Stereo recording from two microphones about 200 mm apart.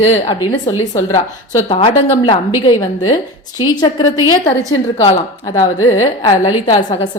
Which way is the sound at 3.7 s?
20° left (ahead or behind).